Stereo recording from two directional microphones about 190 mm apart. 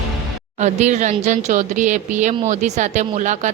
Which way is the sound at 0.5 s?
40° right (ahead or behind).